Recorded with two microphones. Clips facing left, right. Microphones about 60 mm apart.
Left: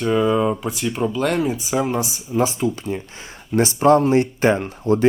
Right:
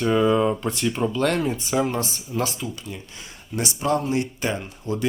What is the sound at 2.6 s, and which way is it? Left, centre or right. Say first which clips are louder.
Speech: left 10 dB; left.